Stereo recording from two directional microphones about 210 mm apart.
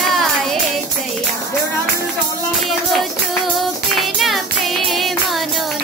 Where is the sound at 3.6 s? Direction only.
Centre (ahead or behind).